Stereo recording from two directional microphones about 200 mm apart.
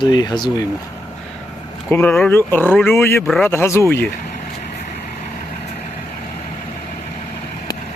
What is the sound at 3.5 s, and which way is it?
Speech, 15° left (ahead or behind).